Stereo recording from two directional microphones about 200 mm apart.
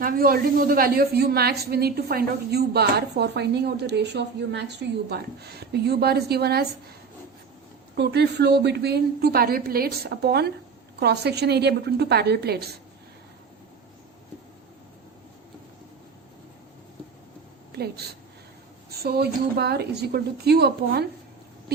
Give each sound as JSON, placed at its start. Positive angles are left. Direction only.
{"t": 0.0, "sound": "a woman's voice", "side_deg": -45}
{"t": 7.9, "sound": "a woman's voice", "side_deg": -55}
{"t": 17.7, "sound": "a woman's voice", "side_deg": -50}